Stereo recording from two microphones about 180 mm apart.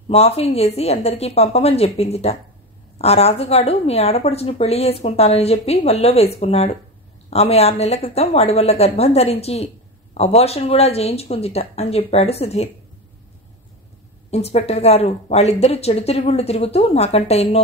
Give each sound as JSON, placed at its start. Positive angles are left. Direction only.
{"t": 0.1, "sound": "speech", "side_deg": 35}
{"t": 14.3, "sound": "speech", "side_deg": 35}